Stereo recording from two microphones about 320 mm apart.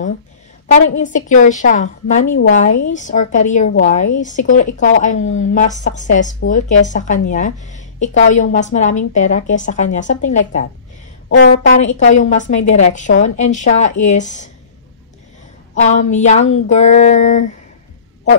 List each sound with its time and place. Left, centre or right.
0.9 s a woman's voice: left
15.7 s a woman's voice: left